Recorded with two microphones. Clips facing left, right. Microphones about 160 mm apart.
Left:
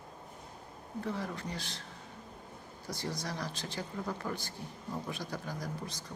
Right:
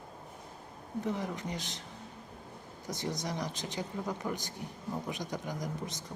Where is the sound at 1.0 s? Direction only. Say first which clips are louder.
Right 2 dB; 20° right (ahead or behind).